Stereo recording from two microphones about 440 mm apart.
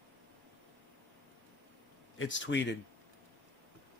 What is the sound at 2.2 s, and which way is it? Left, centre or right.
Speech, left.